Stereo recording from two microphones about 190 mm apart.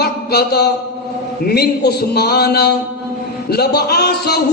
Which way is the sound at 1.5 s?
55° left (ahead or behind).